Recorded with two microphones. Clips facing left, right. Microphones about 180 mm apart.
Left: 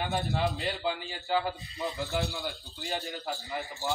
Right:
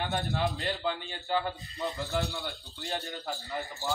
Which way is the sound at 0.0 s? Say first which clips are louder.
Left 1 dB; centre (ahead or behind).